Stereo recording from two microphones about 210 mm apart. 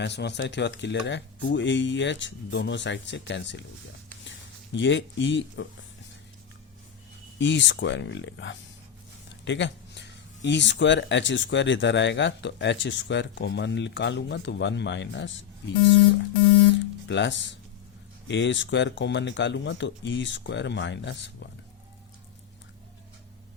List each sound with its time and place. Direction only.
0.0 s speech: 55° left (ahead or behind)
7.3 s speech: 60° left (ahead or behind)
17.1 s speech: 60° left (ahead or behind)